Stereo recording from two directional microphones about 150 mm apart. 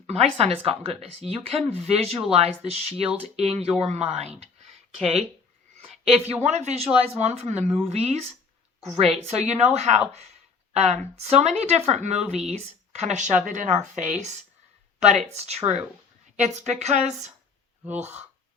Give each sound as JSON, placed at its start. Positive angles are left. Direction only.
{"t": 0.3, "sound": "a woman's voice", "side_deg": -40}
{"t": 5.7, "sound": "a sound", "side_deg": -45}
{"t": 6.4, "sound": "a woman's voice", "side_deg": -50}